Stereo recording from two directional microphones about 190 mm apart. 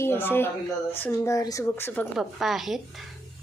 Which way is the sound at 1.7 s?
10° left (ahead or behind).